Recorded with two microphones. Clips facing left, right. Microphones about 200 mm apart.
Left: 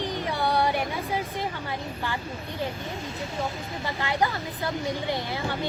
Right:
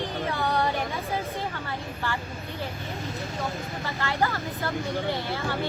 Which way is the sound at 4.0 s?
15° left (ahead or behind).